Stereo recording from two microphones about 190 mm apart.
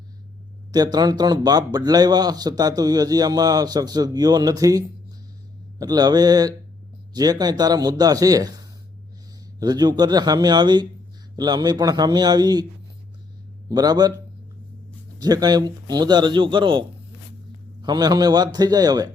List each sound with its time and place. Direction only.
0.7 s a man's voice: 20° right (ahead or behind)
13.7 s a man's voice: 20° right (ahead or behind)
15.2 s a man's voice: 20° right (ahead or behind)
17.8 s a man's voice: 20° right (ahead or behind)